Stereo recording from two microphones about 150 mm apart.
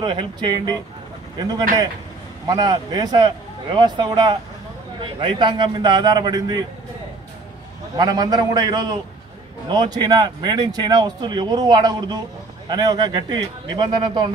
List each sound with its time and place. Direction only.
0.0 s speech: 30° right (ahead or behind)
2.4 s speech: 25° right (ahead or behind)
7.9 s speech: 25° right (ahead or behind)